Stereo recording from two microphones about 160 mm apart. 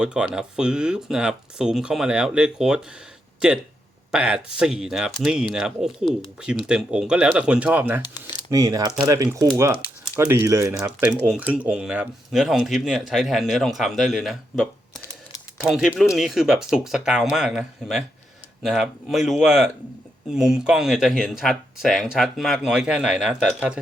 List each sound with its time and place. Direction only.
0.0 s speech: 5° right (ahead or behind)
4.1 s speech: 5° right (ahead or behind)
8.0 s speech: 25° left (ahead or behind)
8.4 s speech: 20° right (ahead or behind); by 14.7 s centre (ahead or behind)
15.7 s speech: centre (ahead or behind)